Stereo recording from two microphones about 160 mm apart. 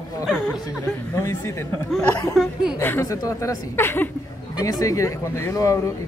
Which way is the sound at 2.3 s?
5° right (ahead or behind).